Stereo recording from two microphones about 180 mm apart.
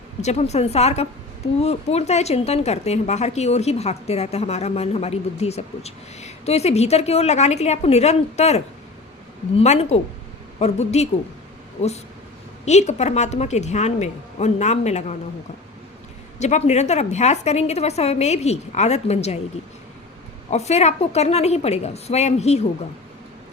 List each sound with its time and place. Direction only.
0.2 s speech: 40° left (ahead or behind)
12.6 s speech: 40° left (ahead or behind)
16.4 s speech: 40° left (ahead or behind)
20.5 s speech: 35° left (ahead or behind)